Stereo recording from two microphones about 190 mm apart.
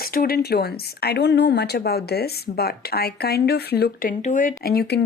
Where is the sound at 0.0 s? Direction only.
50° left (ahead or behind).